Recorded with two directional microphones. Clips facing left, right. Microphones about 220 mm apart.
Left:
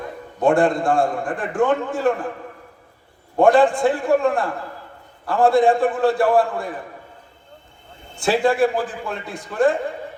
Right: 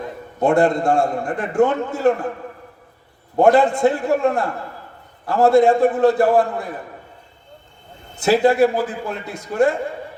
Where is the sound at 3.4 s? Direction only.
20° right (ahead or behind).